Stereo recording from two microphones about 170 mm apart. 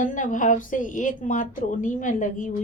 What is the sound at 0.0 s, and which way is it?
A woman's voice, 50° left (ahead or behind).